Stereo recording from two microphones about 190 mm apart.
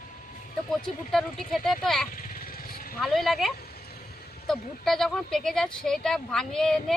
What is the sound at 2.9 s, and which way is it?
Speech, centre (ahead or behind).